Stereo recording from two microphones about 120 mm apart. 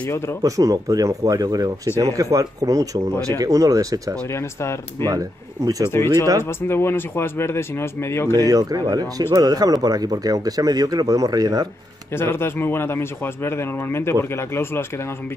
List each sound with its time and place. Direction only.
0.0 s speech: 20° left (ahead or behind)
0.4 s speech: 30° right (ahead or behind)
4.3 s speech: 20° left (ahead or behind)
5.1 s speech: 30° right (ahead or behind)
6.4 s speech: 20° left (ahead or behind)
8.4 s speech: 30° right (ahead or behind)
12.1 s speech: 20° left (ahead or behind)